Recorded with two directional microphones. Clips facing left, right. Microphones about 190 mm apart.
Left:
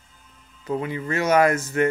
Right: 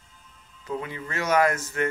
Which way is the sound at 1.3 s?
15° left (ahead or behind).